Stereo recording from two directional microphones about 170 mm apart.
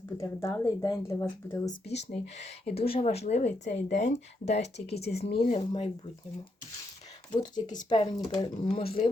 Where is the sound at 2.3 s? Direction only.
40° left (ahead or behind).